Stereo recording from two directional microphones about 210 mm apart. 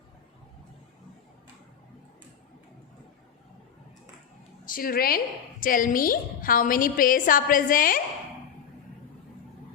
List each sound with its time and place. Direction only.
4.6 s a woman's voice: 40° left (ahead or behind)